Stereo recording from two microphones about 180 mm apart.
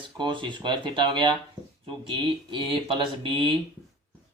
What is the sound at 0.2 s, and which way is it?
Speech, 25° right (ahead or behind).